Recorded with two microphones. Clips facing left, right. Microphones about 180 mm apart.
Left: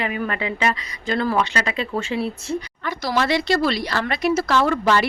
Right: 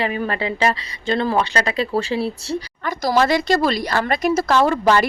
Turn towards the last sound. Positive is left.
turn(degrees=-40)  # may be behind; listen again after turning